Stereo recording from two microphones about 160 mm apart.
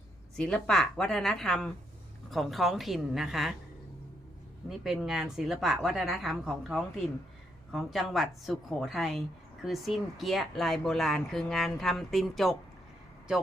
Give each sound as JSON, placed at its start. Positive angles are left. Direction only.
{"t": 0.3, "sound": "speech", "side_deg": 5}
{"t": 4.8, "sound": "speech", "side_deg": 0}